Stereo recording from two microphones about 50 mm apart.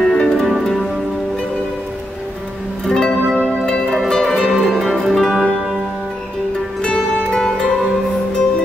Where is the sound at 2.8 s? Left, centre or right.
Centre.